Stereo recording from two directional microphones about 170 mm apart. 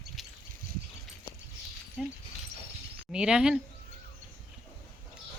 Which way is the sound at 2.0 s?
Centre (ahead or behind).